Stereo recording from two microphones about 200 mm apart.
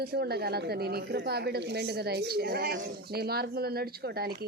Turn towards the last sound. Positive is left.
turn(degrees=-50)  # may be behind; listen again after turning